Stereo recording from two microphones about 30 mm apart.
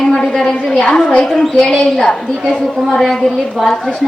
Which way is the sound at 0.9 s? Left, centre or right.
Left.